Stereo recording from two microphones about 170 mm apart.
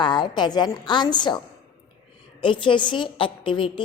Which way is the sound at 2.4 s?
30° left (ahead or behind).